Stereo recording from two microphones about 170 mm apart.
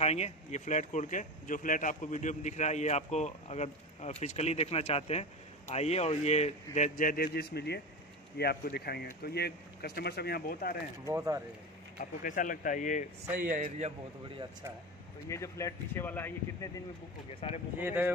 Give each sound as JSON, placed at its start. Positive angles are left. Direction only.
{"t": 0.0, "sound": "speech", "side_deg": 40}
{"t": 11.1, "sound": "speech", "side_deg": -15}
{"t": 12.0, "sound": "speech", "side_deg": 55}
{"t": 13.4, "sound": "a man's voice", "side_deg": -55}
{"t": 15.2, "sound": "speech", "side_deg": 15}
{"t": 17.4, "sound": "speech", "side_deg": 30}
{"t": 17.7, "sound": "speech", "side_deg": -10}